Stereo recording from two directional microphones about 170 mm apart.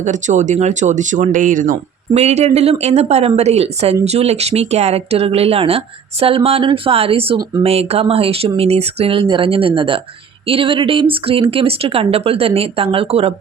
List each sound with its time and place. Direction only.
0.0 s speech: 45° right (ahead or behind)